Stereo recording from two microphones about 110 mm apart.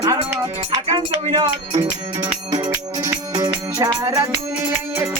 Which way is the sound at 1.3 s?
45° right (ahead or behind).